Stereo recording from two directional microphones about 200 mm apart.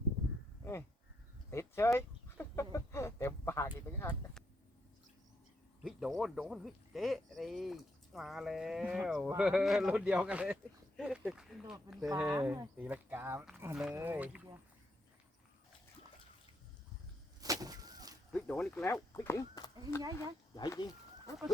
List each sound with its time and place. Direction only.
0.6 s sheep: 10° left (ahead or behind)
1.5 s chicken: 15° left (ahead or behind)
2.7 s speech: 15° left (ahead or behind)
5.8 s speech: centre (ahead or behind)
17.4 s vehicle: 20° right (ahead or behind)
18.3 s speech: 5° left (ahead or behind)